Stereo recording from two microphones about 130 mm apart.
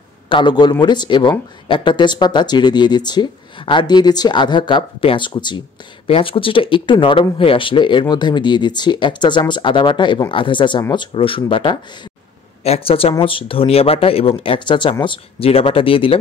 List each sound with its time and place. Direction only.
0.3 s speech: 35° left (ahead or behind)